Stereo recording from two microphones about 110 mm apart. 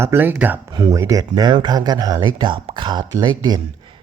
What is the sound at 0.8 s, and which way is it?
Speech, 30° right (ahead or behind).